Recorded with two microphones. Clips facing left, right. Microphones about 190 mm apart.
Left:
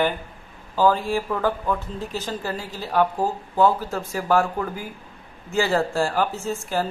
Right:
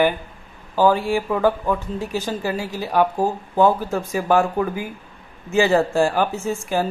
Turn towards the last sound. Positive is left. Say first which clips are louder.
# right 3 dB
turn(degrees=-15)  # may be behind; listen again after turning